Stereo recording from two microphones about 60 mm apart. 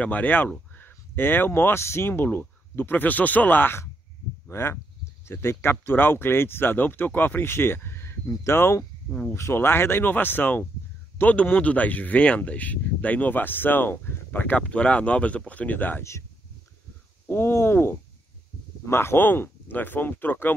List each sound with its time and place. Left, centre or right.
0.0 s speech: left
4.5 s speech: left
14.6 s speech: centre
16.0 s speech: left
17.3 s speech: left